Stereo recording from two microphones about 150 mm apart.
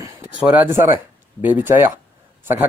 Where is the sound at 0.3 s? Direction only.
10° right (ahead or behind).